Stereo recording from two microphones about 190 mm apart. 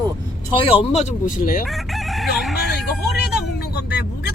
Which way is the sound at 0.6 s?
30° left (ahead or behind).